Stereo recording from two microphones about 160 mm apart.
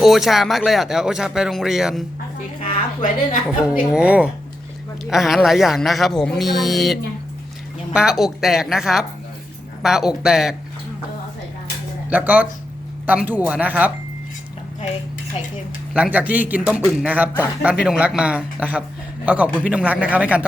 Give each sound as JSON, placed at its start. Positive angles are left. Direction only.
{"t": 0.0, "sound": "speech", "side_deg": 0}
{"t": 2.6, "sound": "a woman's voice", "side_deg": 50}
{"t": 3.8, "sound": "a man's voice", "side_deg": -5}
{"t": 7.9, "sound": "speech", "side_deg": 0}
{"t": 12.1, "sound": "a man's voice", "side_deg": -10}
{"t": 16.1, "sound": "a man's voice", "side_deg": -10}